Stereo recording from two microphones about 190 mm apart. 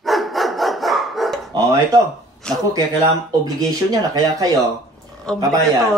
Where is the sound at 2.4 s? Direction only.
5° left (ahead or behind).